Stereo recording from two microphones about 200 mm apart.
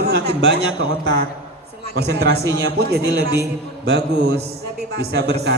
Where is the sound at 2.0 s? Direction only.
55° right (ahead or behind).